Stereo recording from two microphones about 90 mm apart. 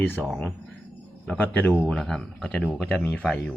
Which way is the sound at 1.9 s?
5° left (ahead or behind).